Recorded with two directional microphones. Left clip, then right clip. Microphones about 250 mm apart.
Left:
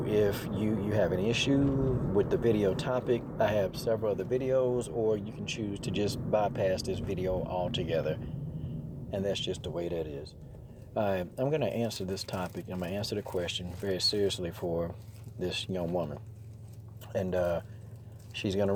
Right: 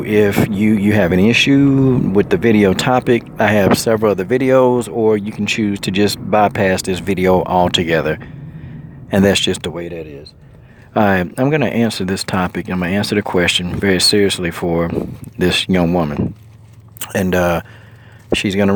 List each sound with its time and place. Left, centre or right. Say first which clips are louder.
0.2 s speech: right 17 dB; right
10.9 s speech: right 16 dB; right